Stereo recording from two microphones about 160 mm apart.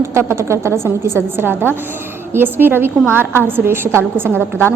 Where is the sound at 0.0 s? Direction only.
15° right (ahead or behind).